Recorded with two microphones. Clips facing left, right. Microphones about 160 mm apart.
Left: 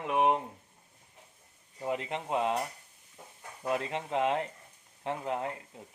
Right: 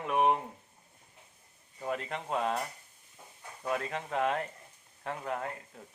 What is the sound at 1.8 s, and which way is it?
Speech, 20° left (ahead or behind).